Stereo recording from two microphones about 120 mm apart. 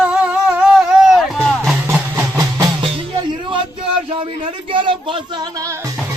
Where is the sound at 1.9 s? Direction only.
25° right (ahead or behind).